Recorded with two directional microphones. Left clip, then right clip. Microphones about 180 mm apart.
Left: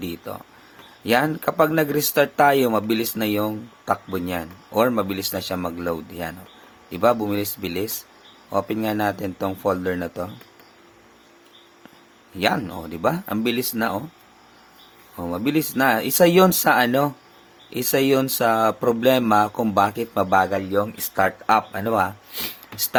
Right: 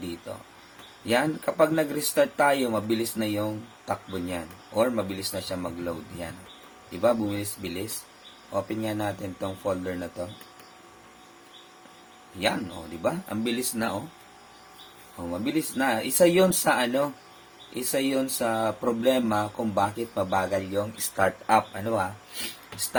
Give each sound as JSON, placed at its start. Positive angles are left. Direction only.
{"t": 1.0, "sound": "speech", "side_deg": 50}
{"t": 13.0, "sound": "speech", "side_deg": 45}
{"t": 15.2, "sound": "speech", "side_deg": 50}